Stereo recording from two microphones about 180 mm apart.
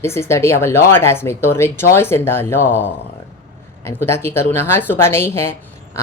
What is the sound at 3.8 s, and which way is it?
Speech, 15° left (ahead or behind).